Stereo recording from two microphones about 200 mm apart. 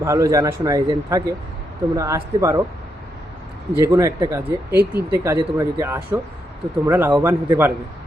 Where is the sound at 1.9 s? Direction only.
15° right (ahead or behind).